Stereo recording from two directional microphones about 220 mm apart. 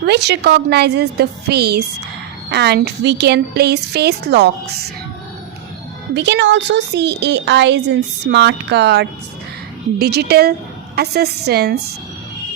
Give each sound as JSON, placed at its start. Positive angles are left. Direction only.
{"t": 0.0, "sound": "a woman's voice", "side_deg": -50}
{"t": 6.1, "sound": "a woman's voice", "side_deg": -50}